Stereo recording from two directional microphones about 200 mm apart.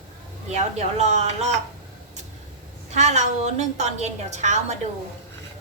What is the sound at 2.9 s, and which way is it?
A woman's voice, 35° right (ahead or behind).